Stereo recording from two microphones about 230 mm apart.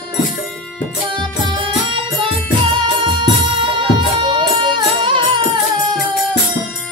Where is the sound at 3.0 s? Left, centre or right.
Right.